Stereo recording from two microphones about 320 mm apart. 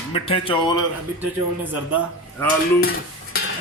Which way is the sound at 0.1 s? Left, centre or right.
Centre.